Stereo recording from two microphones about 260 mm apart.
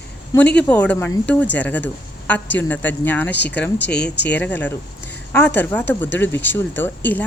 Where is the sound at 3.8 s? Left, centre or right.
Left.